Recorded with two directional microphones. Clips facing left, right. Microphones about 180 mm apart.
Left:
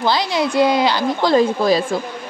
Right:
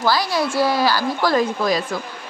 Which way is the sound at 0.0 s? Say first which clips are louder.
Left 1 dB; 20° left (ahead or behind).